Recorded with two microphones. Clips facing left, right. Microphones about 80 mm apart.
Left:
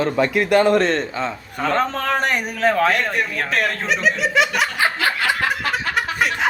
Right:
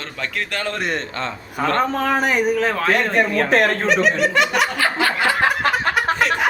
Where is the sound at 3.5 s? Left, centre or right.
Right.